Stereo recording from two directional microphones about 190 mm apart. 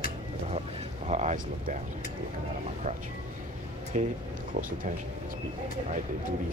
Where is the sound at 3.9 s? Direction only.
40° right (ahead or behind).